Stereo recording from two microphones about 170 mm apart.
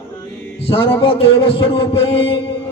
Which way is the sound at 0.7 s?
30° left (ahead or behind).